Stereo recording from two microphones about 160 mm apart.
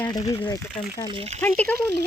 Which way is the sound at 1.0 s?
35° right (ahead or behind).